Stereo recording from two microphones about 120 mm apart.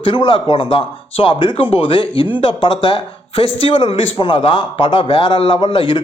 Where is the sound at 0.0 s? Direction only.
45° left (ahead or behind).